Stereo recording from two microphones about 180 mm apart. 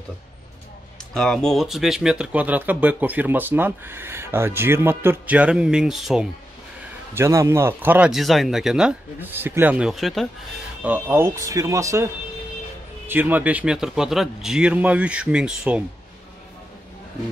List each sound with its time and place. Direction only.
1.1 s speech: 5° left (ahead or behind)
7.2 s speech: 15° right (ahead or behind)
10.8 s speech: 10° right (ahead or behind)